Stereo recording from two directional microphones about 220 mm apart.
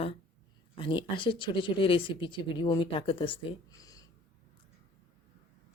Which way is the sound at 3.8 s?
15° left (ahead or behind).